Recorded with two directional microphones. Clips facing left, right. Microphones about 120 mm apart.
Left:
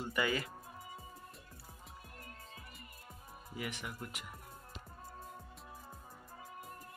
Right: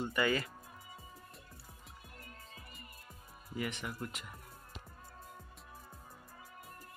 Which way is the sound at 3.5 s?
10° left (ahead or behind).